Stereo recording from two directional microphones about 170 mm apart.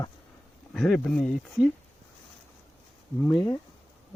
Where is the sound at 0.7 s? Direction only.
5° left (ahead or behind).